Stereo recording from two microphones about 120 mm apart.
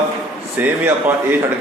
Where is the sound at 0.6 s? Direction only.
15° right (ahead or behind).